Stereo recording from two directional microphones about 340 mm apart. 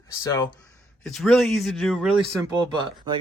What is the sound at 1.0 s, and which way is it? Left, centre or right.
Speech, centre.